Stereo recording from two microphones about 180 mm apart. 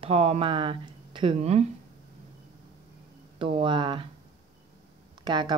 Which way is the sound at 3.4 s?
30° right (ahead or behind).